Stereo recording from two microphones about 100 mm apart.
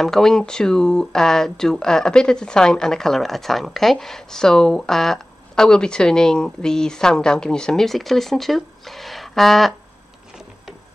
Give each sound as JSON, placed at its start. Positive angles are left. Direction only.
{"t": 0.0, "sound": "speech", "side_deg": 5}